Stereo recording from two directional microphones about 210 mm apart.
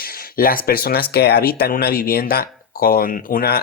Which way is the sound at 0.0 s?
45° left (ahead or behind).